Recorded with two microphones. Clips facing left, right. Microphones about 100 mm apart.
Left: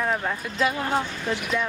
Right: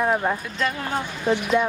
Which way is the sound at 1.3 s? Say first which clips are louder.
Right 7 dB; 20° right (ahead or behind).